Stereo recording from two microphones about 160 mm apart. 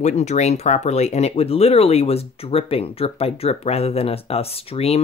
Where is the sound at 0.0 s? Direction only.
45° left (ahead or behind).